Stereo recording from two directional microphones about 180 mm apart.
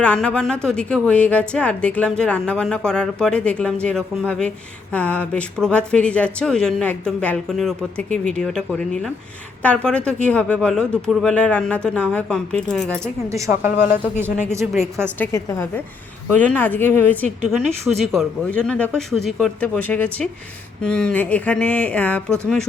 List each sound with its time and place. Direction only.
0.0 s speech: 5° left (ahead or behind)
13.3 s a woman's voice: 15° right (ahead or behind)
14.8 s a woman's voice: 15° right (ahead or behind)
15.2 s speech: 15° left (ahead or behind)